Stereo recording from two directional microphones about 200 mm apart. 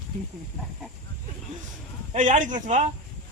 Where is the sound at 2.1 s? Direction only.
40° right (ahead or behind).